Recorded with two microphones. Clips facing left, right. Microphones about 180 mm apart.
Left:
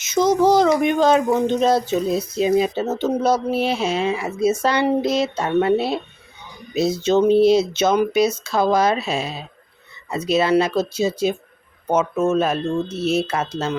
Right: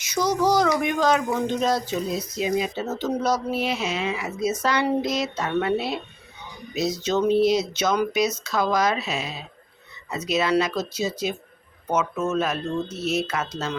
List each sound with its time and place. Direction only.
0.0 s speech: 25° left (ahead or behind)